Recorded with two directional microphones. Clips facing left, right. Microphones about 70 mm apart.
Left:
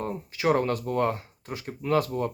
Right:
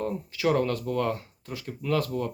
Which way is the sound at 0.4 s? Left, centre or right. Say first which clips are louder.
Left 1 dB; left.